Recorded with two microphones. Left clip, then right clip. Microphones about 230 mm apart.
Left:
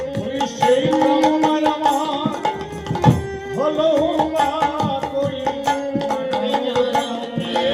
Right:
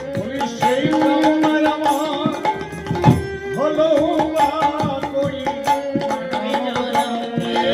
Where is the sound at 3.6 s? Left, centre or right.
Left.